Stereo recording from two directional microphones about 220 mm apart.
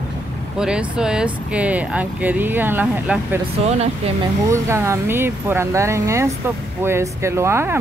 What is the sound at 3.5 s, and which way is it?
Speech, 30° right (ahead or behind).